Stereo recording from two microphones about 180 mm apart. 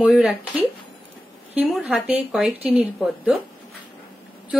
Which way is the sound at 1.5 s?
Centre (ahead or behind).